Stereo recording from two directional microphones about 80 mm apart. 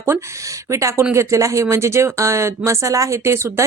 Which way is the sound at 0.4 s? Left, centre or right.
Right.